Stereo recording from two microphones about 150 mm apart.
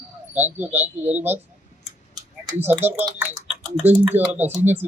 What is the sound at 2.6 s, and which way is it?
Speech, 15° right (ahead or behind).